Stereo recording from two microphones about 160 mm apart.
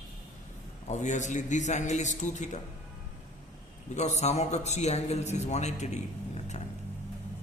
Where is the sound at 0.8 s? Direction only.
50° left (ahead or behind).